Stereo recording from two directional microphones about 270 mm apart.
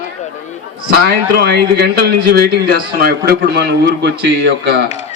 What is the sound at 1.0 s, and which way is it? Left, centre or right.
A man's voice, right.